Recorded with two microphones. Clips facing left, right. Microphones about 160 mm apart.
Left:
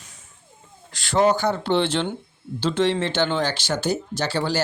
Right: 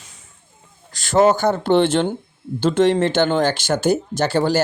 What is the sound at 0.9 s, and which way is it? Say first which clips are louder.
Speech: right 4 dB; 45° right (ahead or behind).